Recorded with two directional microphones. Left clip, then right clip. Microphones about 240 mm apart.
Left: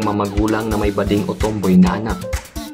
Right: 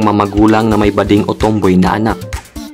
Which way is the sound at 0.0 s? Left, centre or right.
Right.